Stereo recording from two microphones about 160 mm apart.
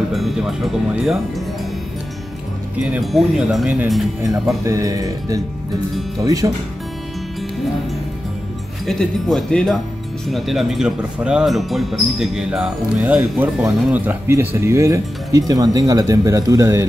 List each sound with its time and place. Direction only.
0.1 s speech: centre (ahead or behind)
2.8 s speech: centre (ahead or behind)
4.6 s speech: 20° right (ahead or behind)
8.8 s speech: 5° left (ahead or behind); by 16.8 s 20° right (ahead or behind)